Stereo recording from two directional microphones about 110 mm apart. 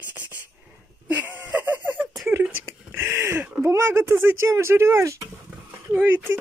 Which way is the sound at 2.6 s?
20° right (ahead or behind).